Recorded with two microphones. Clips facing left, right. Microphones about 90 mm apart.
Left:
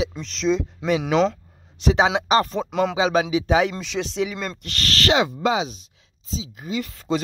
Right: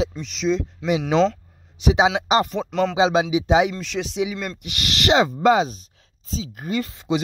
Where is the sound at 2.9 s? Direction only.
25° right (ahead or behind).